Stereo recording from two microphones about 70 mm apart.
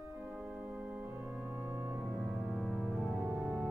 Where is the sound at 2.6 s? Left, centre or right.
Centre.